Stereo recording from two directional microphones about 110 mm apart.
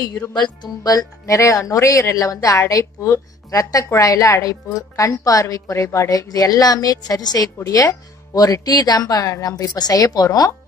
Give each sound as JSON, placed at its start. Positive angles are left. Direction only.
{"t": 0.6, "sound": "speech", "side_deg": 35}